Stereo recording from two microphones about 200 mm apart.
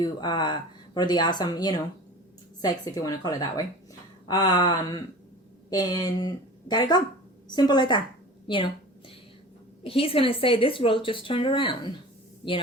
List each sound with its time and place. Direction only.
0.0 s speech: 20° left (ahead or behind)
9.8 s speech: 30° left (ahead or behind)